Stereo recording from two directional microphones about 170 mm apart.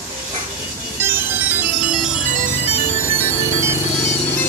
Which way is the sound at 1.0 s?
10° right (ahead or behind).